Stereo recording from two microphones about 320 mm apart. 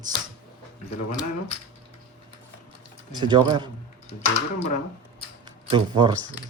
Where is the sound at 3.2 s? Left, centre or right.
Centre.